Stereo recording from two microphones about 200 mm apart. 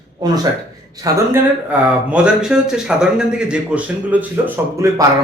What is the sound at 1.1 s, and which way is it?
Speech, 15° right (ahead or behind).